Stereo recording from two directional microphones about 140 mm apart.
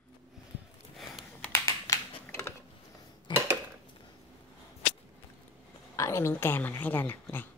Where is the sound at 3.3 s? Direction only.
35° left (ahead or behind).